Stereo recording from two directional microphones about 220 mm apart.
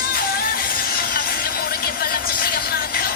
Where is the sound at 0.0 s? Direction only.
45° left (ahead or behind).